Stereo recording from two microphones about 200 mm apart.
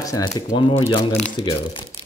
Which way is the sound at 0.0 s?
15° left (ahead or behind).